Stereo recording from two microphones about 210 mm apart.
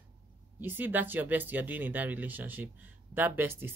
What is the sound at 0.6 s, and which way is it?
A woman's voice, 10° right (ahead or behind).